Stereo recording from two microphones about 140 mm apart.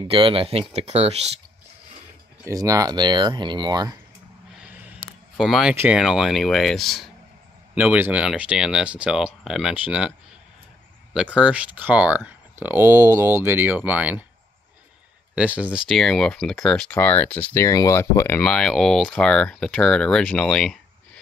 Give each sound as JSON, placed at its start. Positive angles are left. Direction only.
{"t": 0.0, "sound": "speech", "side_deg": -40}
{"t": 2.4, "sound": "speech", "side_deg": -25}
{"t": 4.6, "sound": "a sound", "side_deg": -10}
{"t": 5.8, "sound": "speech", "side_deg": -5}
{"t": 7.7, "sound": "speech", "side_deg": -10}
{"t": 11.1, "sound": "speech", "side_deg": -10}
{"t": 15.3, "sound": "speech", "side_deg": -10}
{"t": 17.6, "sound": "speech", "side_deg": 20}
{"t": 18.4, "sound": "speech", "side_deg": 5}